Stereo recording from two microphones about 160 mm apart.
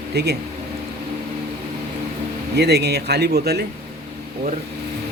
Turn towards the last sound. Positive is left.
turn(degrees=-85)